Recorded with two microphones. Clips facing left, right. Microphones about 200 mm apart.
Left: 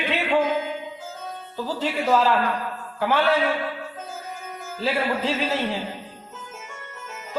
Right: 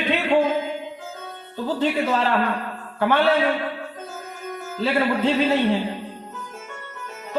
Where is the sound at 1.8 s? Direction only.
60° right (ahead or behind).